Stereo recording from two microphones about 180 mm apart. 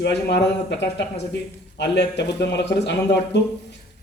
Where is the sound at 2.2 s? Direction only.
70° left (ahead or behind).